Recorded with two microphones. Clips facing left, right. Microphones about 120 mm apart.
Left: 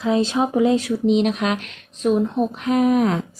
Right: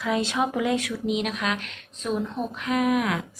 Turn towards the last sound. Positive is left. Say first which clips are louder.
# left 6 dB
turn(degrees=35)  # may be behind; listen again after turning